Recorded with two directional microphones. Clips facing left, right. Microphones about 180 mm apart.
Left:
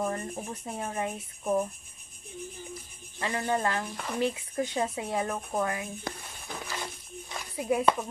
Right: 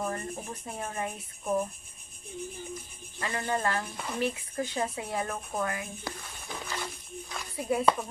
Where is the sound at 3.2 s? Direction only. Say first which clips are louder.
Left 2 dB; 20° left (ahead or behind).